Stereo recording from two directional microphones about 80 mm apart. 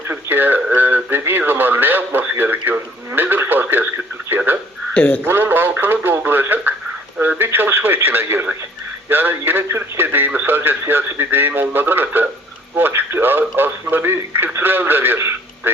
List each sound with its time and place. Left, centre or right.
0.1 s speech: right
4.3 s radio: right
4.9 s a man's voice: centre
5.2 s radio: right